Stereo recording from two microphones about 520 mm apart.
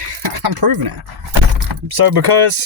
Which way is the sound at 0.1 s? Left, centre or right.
Right.